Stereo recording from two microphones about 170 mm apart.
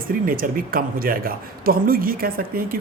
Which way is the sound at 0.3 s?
55° right (ahead or behind).